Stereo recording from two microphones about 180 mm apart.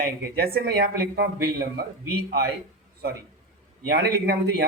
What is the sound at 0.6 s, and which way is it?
Speech, 65° right (ahead or behind).